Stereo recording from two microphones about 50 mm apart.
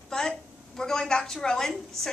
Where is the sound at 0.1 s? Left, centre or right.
Centre.